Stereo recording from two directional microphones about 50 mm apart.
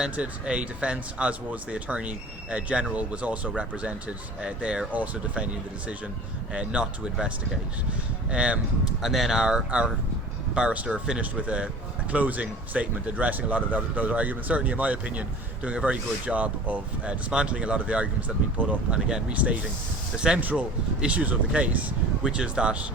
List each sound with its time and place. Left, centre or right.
0.2 s speech: right
4.9 s speech: right
6.5 s speech: right
9.0 s speech: centre; by 18.9 s right
18.9 s speech: centre
19.3 s speech: right
20.1 s speech: centre
20.4 s speech: right